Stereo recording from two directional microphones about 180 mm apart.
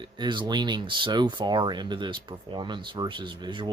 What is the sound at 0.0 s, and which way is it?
Speech, 25° right (ahead or behind).